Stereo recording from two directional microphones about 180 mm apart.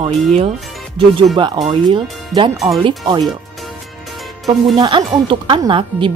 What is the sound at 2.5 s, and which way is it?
Speech, centre (ahead or behind).